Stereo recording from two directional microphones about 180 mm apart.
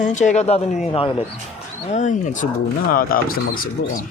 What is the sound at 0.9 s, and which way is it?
Speech, 30° left (ahead or behind).